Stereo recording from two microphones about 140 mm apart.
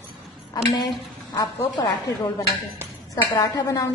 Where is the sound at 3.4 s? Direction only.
25° left (ahead or behind).